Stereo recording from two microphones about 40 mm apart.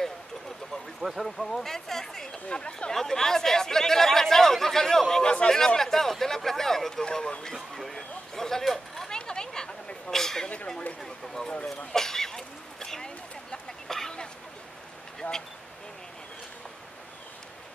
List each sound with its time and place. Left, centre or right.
1.2 s speech: centre
2.5 s speech: left
2.9 s speech: centre
7.7 s a man's voice: centre
9.1 s a sound: centre
10.1 s a man's voice: centre
11.0 s a sound: centre
15.2 s speech: left